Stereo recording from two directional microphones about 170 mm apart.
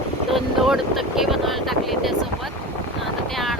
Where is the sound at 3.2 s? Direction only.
Centre (ahead or behind).